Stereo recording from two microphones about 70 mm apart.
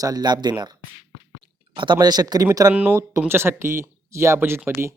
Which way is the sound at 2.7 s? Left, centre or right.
Right.